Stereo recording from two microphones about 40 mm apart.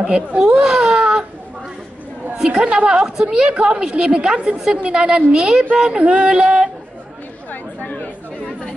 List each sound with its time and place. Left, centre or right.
0.0 s speech: right
2.3 s a woman's voice: right
3.5 s a woman's voice: right
6.4 s speech: centre
7.8 s chatter: left